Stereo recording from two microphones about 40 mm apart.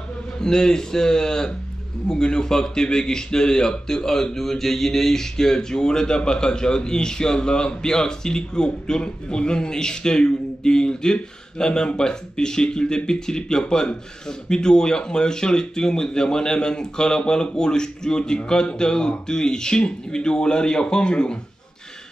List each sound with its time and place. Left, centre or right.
0.4 s a man's voice: centre